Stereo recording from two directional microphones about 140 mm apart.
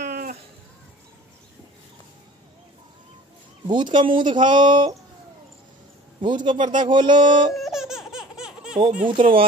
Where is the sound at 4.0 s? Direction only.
35° right (ahead or behind).